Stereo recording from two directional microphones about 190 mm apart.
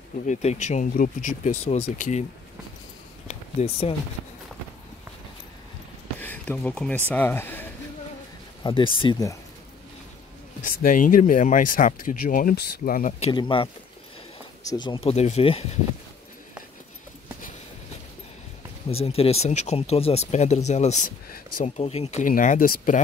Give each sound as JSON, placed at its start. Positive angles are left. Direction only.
{"t": 0.3, "sound": "speech", "side_deg": 35}
{"t": 3.3, "sound": "a sound", "side_deg": 30}
{"t": 6.1, "sound": "speech", "side_deg": 10}
{"t": 8.6, "sound": "speech", "side_deg": 25}
{"t": 10.8, "sound": "speech", "side_deg": 45}
{"t": 13.2, "sound": "speech", "side_deg": 25}
{"t": 18.9, "sound": "speech", "side_deg": 30}